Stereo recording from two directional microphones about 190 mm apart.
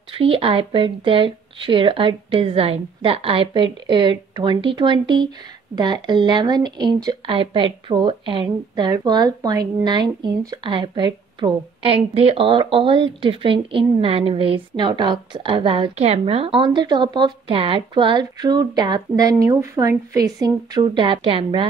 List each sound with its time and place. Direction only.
0.1 s speech: 30° right (ahead or behind)